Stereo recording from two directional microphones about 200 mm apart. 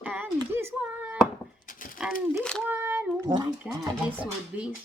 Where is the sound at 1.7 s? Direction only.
45° left (ahead or behind).